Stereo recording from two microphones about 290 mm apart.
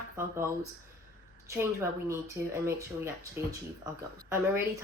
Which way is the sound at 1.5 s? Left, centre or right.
Centre.